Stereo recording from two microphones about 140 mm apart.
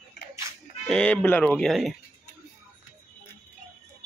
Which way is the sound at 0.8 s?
10° left (ahead or behind).